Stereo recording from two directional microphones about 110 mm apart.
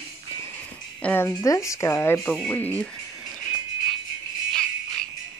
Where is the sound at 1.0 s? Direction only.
20° left (ahead or behind).